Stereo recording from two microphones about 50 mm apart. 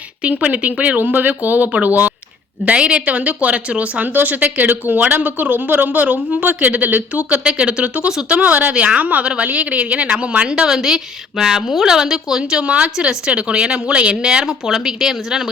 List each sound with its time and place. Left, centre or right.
0.2 s a woman's voice: right; by 15.4 s centre